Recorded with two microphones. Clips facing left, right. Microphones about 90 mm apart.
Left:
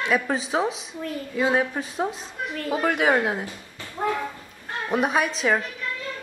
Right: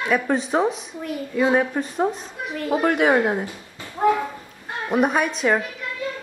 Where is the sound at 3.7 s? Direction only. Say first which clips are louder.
Right 7 dB; 15° right (ahead or behind).